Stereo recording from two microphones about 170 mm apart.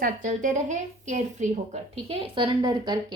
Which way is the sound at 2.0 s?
30° right (ahead or behind).